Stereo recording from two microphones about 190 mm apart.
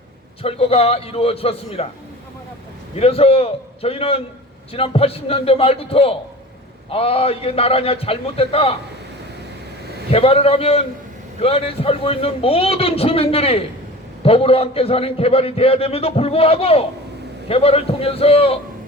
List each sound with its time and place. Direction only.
0.4 s a man's voice: 30° left (ahead or behind)
3.0 s a man's voice: 30° left (ahead or behind)
10.1 s a man's voice: 30° left (ahead or behind)